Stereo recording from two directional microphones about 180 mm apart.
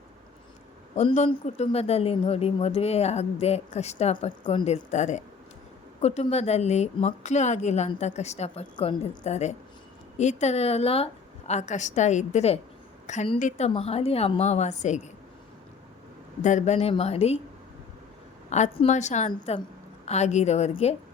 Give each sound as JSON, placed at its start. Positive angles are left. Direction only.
{"t": 0.9, "sound": "speech", "side_deg": 40}
{"t": 8.7, "sound": "a woman's voice", "side_deg": 25}
{"t": 9.2, "sound": "speech", "side_deg": 40}
{"t": 16.4, "sound": "speech", "side_deg": 40}
{"t": 18.5, "sound": "speech", "side_deg": 35}